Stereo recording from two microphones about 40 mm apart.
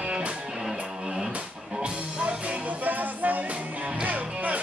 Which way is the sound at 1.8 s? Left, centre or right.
Right.